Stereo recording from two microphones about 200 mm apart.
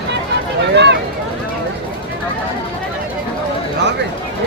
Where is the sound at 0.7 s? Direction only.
60° right (ahead or behind).